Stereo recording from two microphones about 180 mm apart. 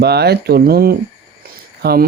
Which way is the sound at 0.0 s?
65° right (ahead or behind).